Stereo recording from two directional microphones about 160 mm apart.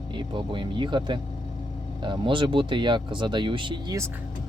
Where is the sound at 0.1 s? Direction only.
30° right (ahead or behind).